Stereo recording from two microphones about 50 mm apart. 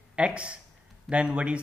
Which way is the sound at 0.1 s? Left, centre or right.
Right.